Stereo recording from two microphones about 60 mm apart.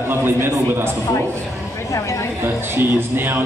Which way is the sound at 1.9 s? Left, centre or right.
Left.